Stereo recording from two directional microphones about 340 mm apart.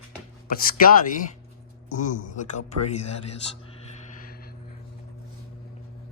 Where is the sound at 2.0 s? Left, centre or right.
Left.